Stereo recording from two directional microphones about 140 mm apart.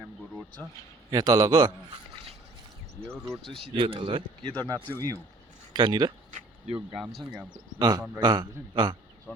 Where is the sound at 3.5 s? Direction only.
40° right (ahead or behind).